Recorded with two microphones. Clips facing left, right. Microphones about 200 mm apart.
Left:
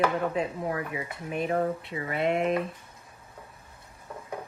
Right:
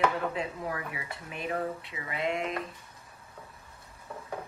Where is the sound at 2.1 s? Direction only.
60° left (ahead or behind).